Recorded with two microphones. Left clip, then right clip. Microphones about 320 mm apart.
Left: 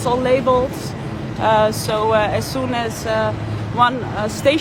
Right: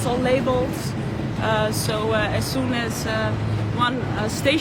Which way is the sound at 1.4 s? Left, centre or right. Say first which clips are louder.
Left 7 dB; left.